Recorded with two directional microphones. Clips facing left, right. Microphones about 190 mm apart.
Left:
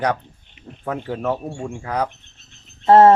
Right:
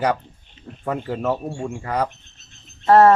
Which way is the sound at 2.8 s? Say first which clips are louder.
Left 2 dB; 25° left (ahead or behind).